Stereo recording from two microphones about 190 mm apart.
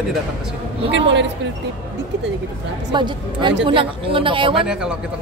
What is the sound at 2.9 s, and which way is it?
Speech, 25° right (ahead or behind).